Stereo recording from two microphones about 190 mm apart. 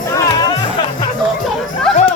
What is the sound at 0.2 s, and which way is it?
Music, 20° left (ahead or behind).